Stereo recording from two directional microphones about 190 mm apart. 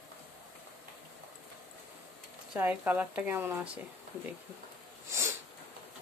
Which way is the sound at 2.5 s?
10° right (ahead or behind).